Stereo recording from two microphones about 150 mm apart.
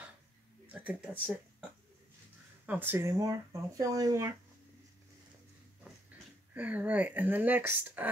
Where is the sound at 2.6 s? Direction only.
10° right (ahead or behind).